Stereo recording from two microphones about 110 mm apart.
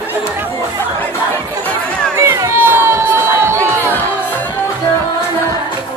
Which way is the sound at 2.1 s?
25° right (ahead or behind).